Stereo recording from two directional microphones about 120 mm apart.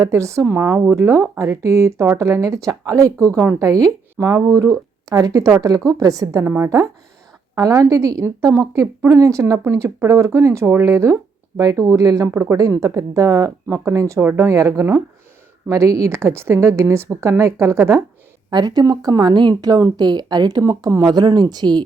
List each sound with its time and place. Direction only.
0.0 s speech: 25° right (ahead or behind)
6.4 s a woman's voice: 15° right (ahead or behind)
6.7 s speech: 25° right (ahead or behind)
18.5 s speech: 35° right (ahead or behind)